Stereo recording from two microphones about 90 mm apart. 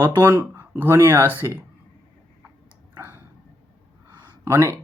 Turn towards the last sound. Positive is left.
turn(degrees=-35)  # may be behind; listen again after turning